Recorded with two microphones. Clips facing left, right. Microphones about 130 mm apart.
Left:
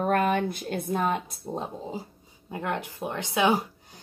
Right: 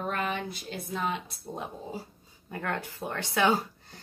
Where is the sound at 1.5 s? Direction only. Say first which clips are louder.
Left 4 dB; 30° left (ahead or behind).